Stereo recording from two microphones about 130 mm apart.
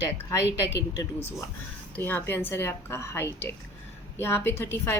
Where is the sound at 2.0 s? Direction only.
15° left (ahead or behind).